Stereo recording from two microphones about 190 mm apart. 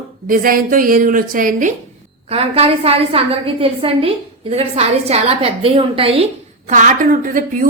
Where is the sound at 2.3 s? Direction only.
30° right (ahead or behind).